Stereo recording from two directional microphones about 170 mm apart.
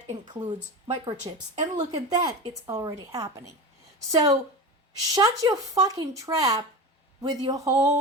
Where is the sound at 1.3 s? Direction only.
30° right (ahead or behind).